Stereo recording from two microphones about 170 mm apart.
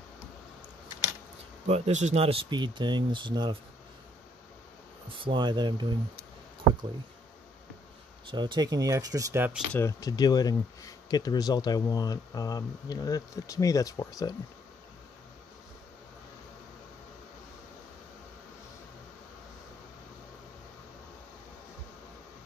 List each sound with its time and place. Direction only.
1.7 s speech: 45° right (ahead or behind); by 3.5 s 25° right (ahead or behind)
5.1 s speech: 30° right (ahead or behind)
8.3 s speech: 25° right (ahead or behind)
9.8 s speech: 20° left (ahead or behind)